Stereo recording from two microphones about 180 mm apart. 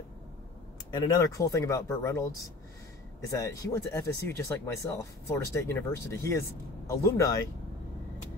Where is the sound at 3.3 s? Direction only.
20° left (ahead or behind).